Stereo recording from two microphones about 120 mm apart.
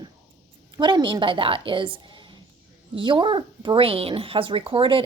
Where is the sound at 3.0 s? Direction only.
45° right (ahead or behind).